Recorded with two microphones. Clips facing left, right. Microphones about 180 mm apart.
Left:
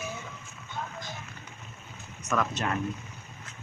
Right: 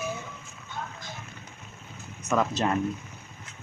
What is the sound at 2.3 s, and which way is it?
Speech, 30° right (ahead or behind).